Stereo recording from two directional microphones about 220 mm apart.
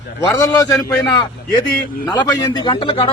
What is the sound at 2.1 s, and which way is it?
Speech, 15° left (ahead or behind).